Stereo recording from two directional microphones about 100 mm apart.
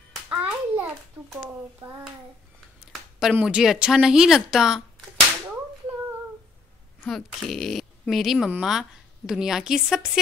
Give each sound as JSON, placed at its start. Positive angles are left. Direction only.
{"t": 0.3, "sound": "hands", "side_deg": -15}
{"t": 2.9, "sound": "a sound", "side_deg": 0}
{"t": 3.4, "sound": "a woman's voice", "side_deg": -5}
{"t": 7.1, "sound": "a woman's voice", "side_deg": 0}